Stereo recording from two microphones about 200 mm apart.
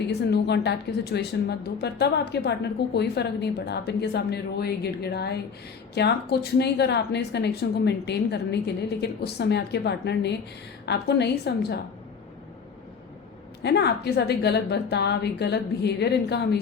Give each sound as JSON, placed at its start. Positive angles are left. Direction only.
{"t": 0.1, "sound": "a woman's voice", "side_deg": 55}
{"t": 13.6, "sound": "a woman's voice", "side_deg": 55}